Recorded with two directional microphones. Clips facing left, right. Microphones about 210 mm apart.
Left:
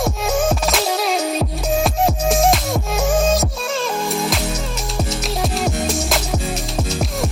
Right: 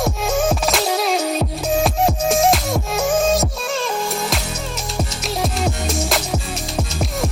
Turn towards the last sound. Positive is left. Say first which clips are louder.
# left 1 dB
turn(degrees=0)  # may be behind; listen again after turning